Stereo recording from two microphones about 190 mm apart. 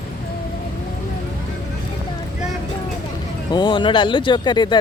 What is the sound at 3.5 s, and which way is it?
Speech, 25° left (ahead or behind).